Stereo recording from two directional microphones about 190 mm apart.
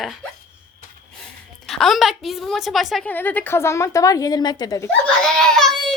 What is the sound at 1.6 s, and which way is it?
A woman's voice, centre (ahead or behind).